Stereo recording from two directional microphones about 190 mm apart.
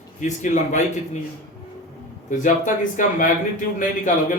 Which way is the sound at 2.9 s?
45° left (ahead or behind).